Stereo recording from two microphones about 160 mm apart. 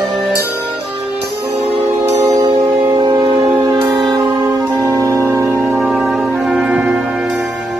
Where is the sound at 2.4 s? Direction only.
25° right (ahead or behind).